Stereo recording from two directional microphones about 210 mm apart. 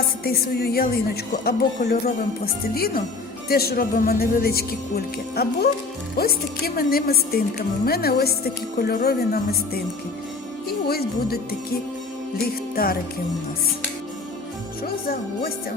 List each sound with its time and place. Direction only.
0.3 s a woman's voice: 50° left (ahead or behind)
12.7 s a woman's voice: 45° left (ahead or behind)